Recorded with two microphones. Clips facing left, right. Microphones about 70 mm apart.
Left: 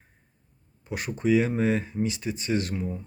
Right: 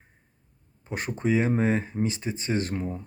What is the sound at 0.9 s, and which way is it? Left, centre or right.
Speech, right.